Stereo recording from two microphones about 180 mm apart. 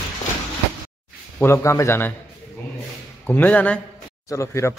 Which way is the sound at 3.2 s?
10° left (ahead or behind).